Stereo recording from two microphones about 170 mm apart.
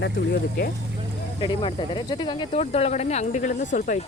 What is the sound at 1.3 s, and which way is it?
Speech, 25° left (ahead or behind).